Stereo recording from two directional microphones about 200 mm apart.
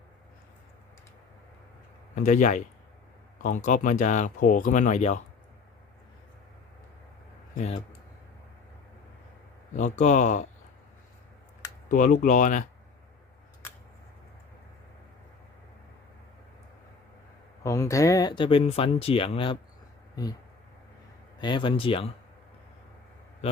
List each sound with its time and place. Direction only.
2.1 s a man's voice: 40° left (ahead or behind)
7.5 s speech: 40° left (ahead or behind)
9.7 s speech: 35° left (ahead or behind)
11.9 s speech: 40° left (ahead or behind)
17.6 s speech: 15° left (ahead or behind)
21.3 s speech: 20° left (ahead or behind)